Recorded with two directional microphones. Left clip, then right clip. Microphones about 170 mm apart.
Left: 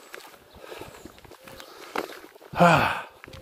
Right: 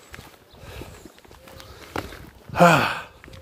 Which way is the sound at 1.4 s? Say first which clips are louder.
Even; 40° left (ahead or behind).